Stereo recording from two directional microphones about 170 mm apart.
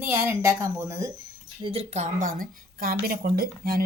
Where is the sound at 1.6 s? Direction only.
35° right (ahead or behind).